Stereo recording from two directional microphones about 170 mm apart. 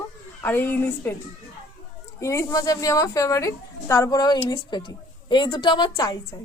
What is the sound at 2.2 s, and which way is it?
A woman's voice, 20° left (ahead or behind).